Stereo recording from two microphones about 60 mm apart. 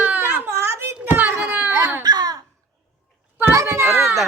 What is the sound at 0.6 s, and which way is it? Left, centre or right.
Speech, right.